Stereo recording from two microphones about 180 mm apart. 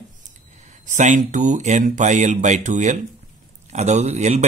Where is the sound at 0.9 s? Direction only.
40° right (ahead or behind).